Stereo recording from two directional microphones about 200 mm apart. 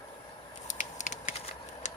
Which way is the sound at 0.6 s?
40° left (ahead or behind).